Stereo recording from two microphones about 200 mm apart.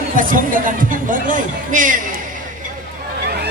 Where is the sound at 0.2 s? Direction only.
45° right (ahead or behind).